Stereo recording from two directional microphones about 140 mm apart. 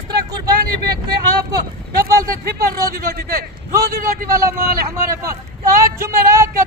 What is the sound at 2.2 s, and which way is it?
A man's voice, 90° right.